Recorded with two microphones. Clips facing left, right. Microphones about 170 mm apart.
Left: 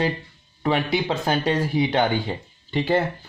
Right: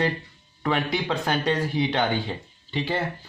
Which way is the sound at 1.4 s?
10° left (ahead or behind).